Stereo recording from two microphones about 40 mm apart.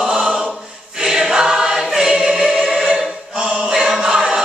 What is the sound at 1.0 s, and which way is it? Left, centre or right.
Choir, centre.